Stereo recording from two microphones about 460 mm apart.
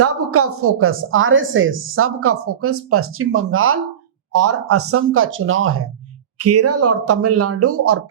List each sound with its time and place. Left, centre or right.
0.0 s a woman's voice: right